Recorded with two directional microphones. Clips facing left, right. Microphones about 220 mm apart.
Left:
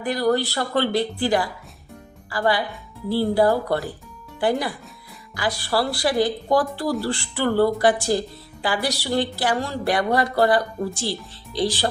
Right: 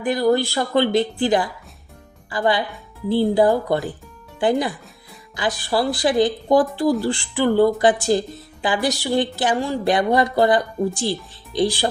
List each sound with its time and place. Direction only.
0.0 s a woman's voice: 15° right (ahead or behind)